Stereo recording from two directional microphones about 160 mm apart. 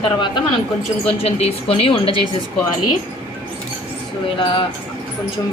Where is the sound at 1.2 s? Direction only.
40° left (ahead or behind).